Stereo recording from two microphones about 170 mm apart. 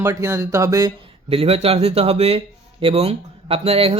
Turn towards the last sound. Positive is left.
turn(degrees=-35)  # may be behind; listen again after turning